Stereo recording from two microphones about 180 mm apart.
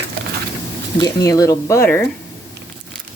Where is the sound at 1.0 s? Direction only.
20° left (ahead or behind).